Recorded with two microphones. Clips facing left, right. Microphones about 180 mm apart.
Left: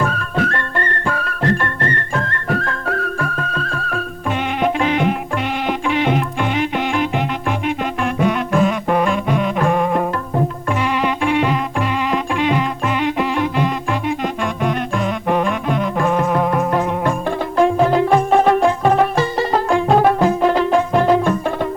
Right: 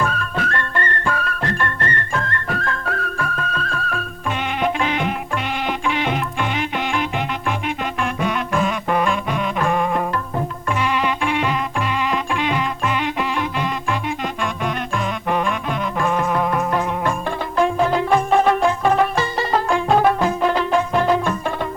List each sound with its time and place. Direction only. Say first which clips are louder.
0.0 s music: left 3 dB; 40° left (ahead or behind)